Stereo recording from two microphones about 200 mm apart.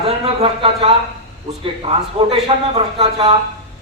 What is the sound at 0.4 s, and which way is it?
A man's voice, 25° right (ahead or behind).